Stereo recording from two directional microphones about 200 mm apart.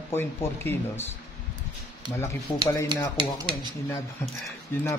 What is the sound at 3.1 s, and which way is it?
Speech, 20° right (ahead or behind).